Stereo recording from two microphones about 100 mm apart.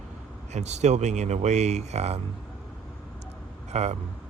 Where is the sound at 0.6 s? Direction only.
90° right.